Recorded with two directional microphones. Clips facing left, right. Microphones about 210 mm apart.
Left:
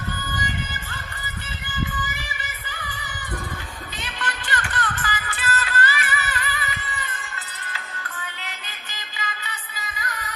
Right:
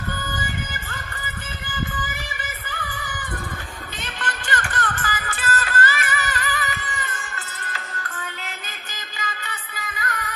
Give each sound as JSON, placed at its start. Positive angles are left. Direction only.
{"t": 4.0, "sound": "music", "side_deg": -50}
{"t": 9.2, "sound": "music", "side_deg": -50}